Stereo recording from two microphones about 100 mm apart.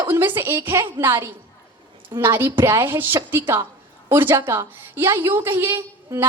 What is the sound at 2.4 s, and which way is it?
A woman's voice, 25° right (ahead or behind).